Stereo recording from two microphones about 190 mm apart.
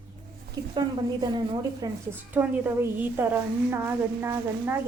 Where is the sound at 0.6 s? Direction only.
20° right (ahead or behind).